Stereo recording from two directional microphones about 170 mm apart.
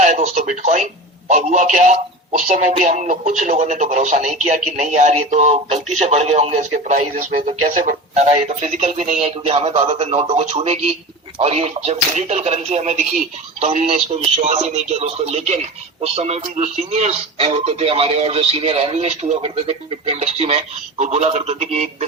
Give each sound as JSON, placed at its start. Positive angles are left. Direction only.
{"t": 0.0, "sound": "speech", "side_deg": -45}